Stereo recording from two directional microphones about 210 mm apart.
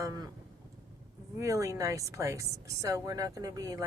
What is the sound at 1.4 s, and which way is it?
Speech, 15° right (ahead or behind).